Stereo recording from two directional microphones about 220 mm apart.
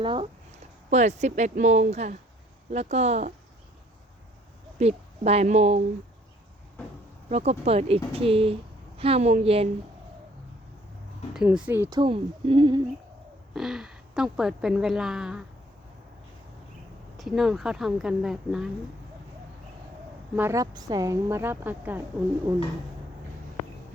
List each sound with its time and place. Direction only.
0.0 s speech: 20° right (ahead or behind)
4.8 s speech: 30° right (ahead or behind)
7.3 s speech: 30° right (ahead or behind)
11.3 s a woman's voice: 5° right (ahead or behind); by 12.8 s 20° right (ahead or behind)
13.5 s a woman's voice: centre (ahead or behind)
17.2 s a woman's voice: centre (ahead or behind)
20.3 s a woman's voice: 10° right (ahead or behind)